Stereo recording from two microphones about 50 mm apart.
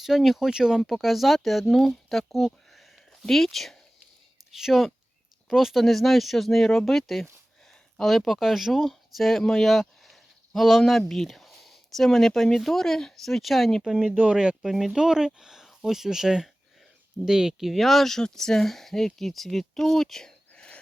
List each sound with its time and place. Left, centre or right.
0.0 s speech: centre
0.8 s speech: centre
14.2 s speech: right
14.6 s speech: centre
17.7 s speech: centre